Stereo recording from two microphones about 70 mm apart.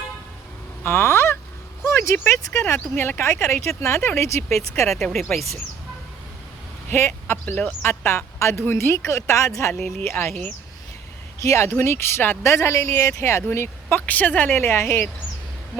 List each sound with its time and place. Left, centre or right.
0.9 s fowl: left
1.8 s a sound: left
2.1 s speech: left
4.9 s speech: centre
6.9 s speech: left
7.4 s speech: left
11.4 s speech: left
12.5 s a woman's voice: left
14.1 s a woman's voice: left